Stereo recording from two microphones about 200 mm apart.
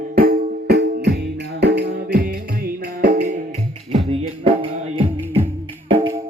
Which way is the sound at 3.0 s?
45° right (ahead or behind).